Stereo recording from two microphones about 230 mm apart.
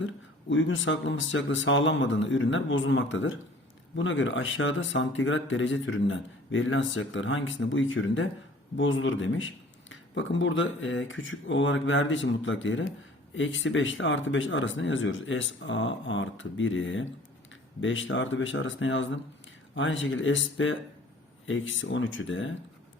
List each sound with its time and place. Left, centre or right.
0.0 s speech: left